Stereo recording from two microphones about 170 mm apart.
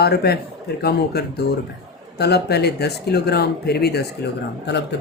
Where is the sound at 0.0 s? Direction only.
70° left (ahead or behind).